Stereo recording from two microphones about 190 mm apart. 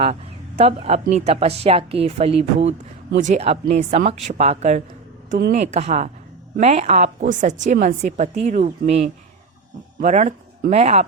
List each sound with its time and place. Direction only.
0.0 s speech: 35° right (ahead or behind)
10.0 s speech: 40° right (ahead or behind)